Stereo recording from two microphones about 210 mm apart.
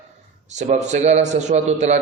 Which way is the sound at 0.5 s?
35° right (ahead or behind).